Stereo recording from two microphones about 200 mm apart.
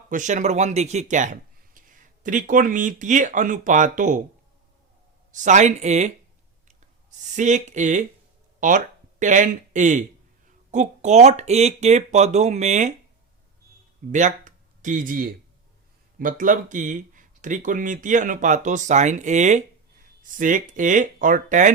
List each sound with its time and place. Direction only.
0.1 s a man's voice: 40° right (ahead or behind)
5.3 s speech: 40° right (ahead or behind)
7.3 s speech: 35° right (ahead or behind)
14.1 s speech: 40° right (ahead or behind)